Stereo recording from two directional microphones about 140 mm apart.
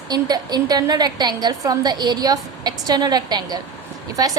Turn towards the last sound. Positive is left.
turn(degrees=-25)  # may be behind; listen again after turning